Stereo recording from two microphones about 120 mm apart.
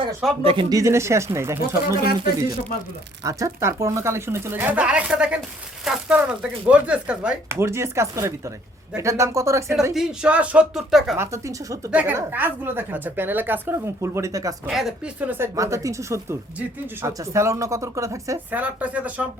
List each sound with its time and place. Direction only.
0.4 s speech: 50° right (ahead or behind)
0.7 s speech: 25° right (ahead or behind)
3.2 s a woman's voice: 25° right (ahead or behind); by 7.3 s 10° right (ahead or behind)
7.4 s speech: 20° right (ahead or behind)
9.9 s speech: 5° right (ahead or behind)
11.2 s speech: 25° right (ahead or behind)
11.9 s a woman's voice: 15° right (ahead or behind)
14.7 s speech: 5° right (ahead or behind)
15.3 s speech: 25° right (ahead or behind)
18.5 s a woman's voice: 10° right (ahead or behind)